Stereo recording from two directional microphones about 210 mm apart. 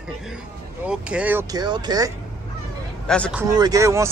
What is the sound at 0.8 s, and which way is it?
A man's voice, 5° right (ahead or behind).